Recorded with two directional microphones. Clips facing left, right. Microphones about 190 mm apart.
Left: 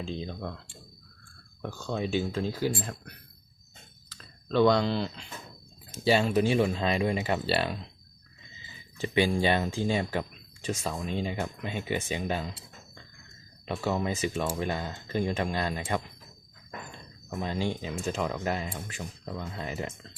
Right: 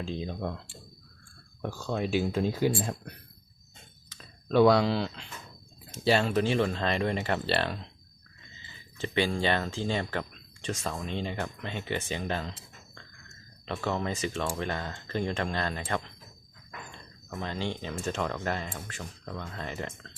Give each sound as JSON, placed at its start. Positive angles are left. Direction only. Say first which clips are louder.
{"t": 0.0, "sound": "speech", "louder": "right 1 dB", "side_deg": 0}
{"t": 0.3, "sound": "speech", "louder": "right 3 dB", "side_deg": -15}
{"t": 1.6, "sound": "speech", "louder": "right 1 dB", "side_deg": -10}
{"t": 4.2, "sound": "speech", "louder": "right 2 dB", "side_deg": -10}
{"t": 9.0, "sound": "speech", "louder": "left 3 dB", "side_deg": 10}
{"t": 17.2, "sound": "speech", "louder": "left 3 dB", "side_deg": 15}